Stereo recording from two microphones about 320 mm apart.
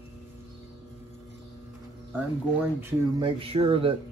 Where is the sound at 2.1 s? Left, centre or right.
Centre.